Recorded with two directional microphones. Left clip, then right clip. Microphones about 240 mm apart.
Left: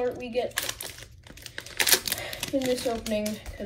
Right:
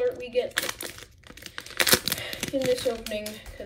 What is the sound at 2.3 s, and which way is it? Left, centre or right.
Speech, centre.